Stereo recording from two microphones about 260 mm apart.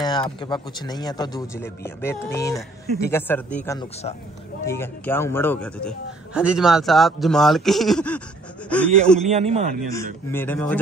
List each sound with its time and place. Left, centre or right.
0.0 s a man's voice: centre
9.2 s a man's voice: right
9.8 s speech: centre